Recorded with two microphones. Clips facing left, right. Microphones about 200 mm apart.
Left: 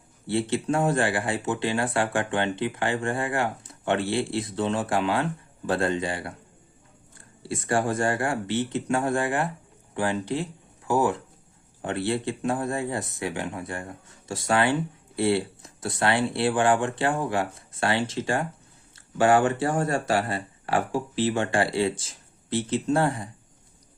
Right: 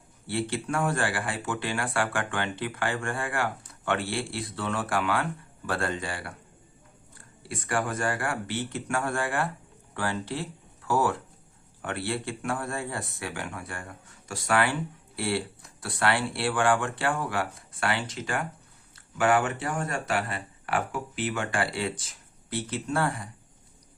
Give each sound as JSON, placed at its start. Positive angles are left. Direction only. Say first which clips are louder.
{"t": 0.3, "sound": "speech", "louder": "left 5 dB", "side_deg": 20}
{"t": 7.4, "sound": "speech", "louder": "left 5 dB", "side_deg": 30}